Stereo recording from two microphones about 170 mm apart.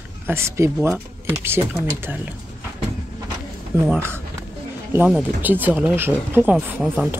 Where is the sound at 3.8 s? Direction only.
15° right (ahead or behind).